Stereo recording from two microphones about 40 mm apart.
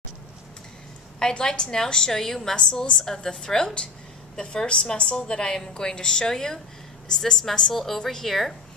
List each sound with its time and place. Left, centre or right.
1.4 s a woman's voice: centre